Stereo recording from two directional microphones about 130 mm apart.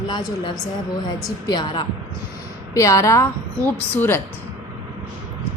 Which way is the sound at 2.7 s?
25° left (ahead or behind).